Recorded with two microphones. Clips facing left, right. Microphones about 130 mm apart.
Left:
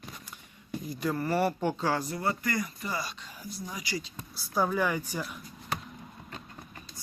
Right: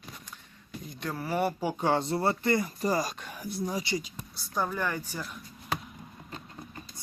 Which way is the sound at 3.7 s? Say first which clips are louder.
Right 3 dB; 25° right (ahead or behind).